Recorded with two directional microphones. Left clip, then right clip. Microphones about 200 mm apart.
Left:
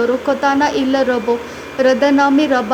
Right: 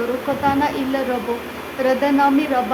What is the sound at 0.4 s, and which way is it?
Speech, 25° left (ahead or behind).